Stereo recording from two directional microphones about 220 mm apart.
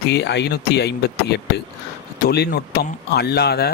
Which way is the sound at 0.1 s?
50° left (ahead or behind).